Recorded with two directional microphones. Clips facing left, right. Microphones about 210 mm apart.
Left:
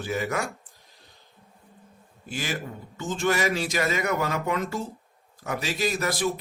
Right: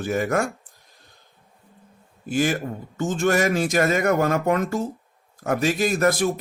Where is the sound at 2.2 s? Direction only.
50° right (ahead or behind).